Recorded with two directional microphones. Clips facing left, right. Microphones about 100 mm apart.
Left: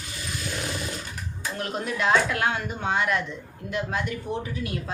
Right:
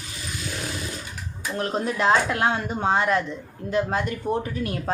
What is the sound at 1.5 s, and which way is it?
Speech, 35° right (ahead or behind).